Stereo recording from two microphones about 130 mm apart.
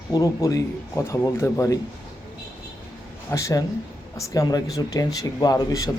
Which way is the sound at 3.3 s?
25° left (ahead or behind).